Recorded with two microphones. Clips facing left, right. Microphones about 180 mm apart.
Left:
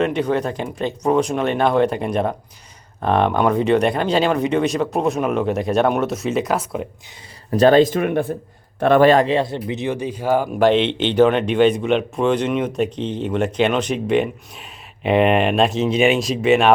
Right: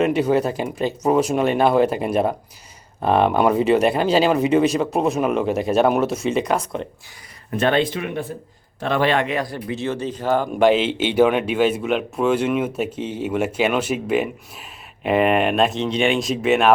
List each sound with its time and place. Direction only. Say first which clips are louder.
0.0 s speech: right 2 dB; 5° right (ahead or behind)
7.5 s speech: left 7 dB; 40° left (ahead or behind); by 10.7 s 10° left (ahead or behind)
10.7 s speech: left 1 dB; 5° right (ahead or behind)